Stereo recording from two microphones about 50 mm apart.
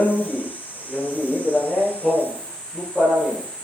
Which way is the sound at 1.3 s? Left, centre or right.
Left.